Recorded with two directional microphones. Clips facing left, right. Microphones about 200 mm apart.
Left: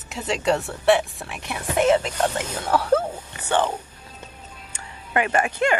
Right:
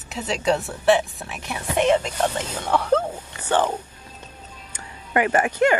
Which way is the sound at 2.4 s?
10° left (ahead or behind).